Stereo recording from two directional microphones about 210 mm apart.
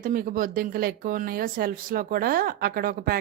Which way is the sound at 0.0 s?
40° right (ahead or behind).